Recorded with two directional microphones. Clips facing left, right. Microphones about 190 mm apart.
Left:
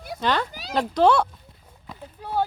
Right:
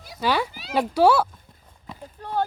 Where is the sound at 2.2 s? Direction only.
10° left (ahead or behind).